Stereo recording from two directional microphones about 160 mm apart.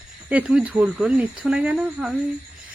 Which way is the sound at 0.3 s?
5° right (ahead or behind).